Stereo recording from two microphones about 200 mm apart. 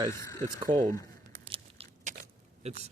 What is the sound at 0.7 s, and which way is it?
Speech, 20° right (ahead or behind).